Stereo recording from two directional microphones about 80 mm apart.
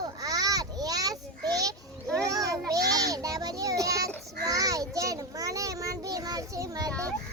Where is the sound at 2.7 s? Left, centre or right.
Right.